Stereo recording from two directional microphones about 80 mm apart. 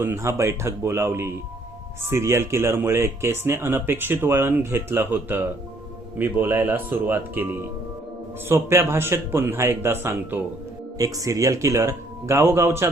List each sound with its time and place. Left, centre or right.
0.0 s speech: right
10.9 s speech: right